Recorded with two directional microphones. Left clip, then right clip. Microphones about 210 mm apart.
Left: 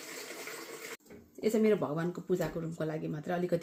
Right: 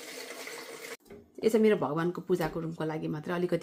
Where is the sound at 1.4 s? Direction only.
20° right (ahead or behind).